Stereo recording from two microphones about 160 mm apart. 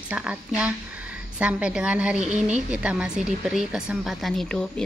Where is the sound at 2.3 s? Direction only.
45° right (ahead or behind).